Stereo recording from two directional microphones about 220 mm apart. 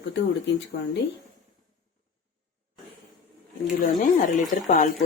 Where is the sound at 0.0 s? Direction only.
55° left (ahead or behind).